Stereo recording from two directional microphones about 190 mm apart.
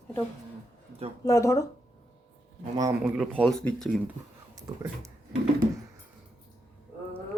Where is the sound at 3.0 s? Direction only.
Centre (ahead or behind).